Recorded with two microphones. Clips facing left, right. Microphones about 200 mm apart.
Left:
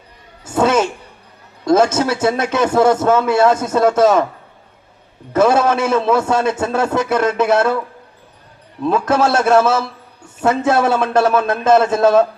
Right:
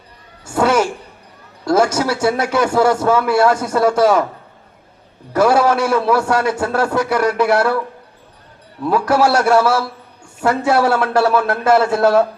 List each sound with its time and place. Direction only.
0.4 s a sound: 20° left (ahead or behind)
1.6 s a man's voice: 20° left (ahead or behind)
5.3 s a man's voice: 20° left (ahead or behind)
8.8 s a man's voice: 20° left (ahead or behind)